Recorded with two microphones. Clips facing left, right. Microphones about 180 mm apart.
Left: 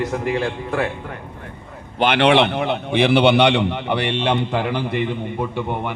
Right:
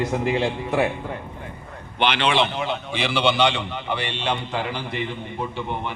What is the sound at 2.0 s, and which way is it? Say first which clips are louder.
A man's voice: left 6 dB; 60° left (ahead or behind).